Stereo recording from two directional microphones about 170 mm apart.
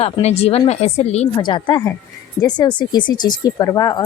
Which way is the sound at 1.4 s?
25° left (ahead or behind).